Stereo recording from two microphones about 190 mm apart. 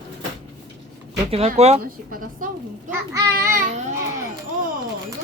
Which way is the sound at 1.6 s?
35° right (ahead or behind).